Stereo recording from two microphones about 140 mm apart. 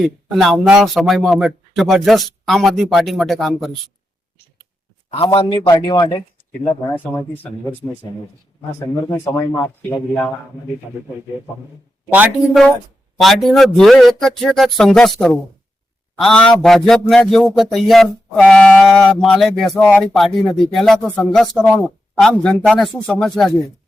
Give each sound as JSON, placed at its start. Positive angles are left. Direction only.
{"t": 0.0, "sound": "speech", "side_deg": 0}
{"t": 5.1, "sound": "a man's voice", "side_deg": 40}
{"t": 6.9, "sound": "speech", "side_deg": 15}
{"t": 9.0, "sound": "speech", "side_deg": 20}
{"t": 13.1, "sound": "speech", "side_deg": 0}
{"t": 19.8, "sound": "speech", "side_deg": 10}
{"t": 20.1, "sound": "speech", "side_deg": 0}